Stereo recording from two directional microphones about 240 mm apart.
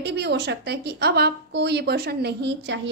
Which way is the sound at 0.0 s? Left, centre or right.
Right.